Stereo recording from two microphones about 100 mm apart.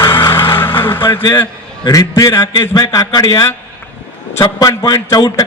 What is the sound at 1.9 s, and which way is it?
Speech, 35° left (ahead or behind).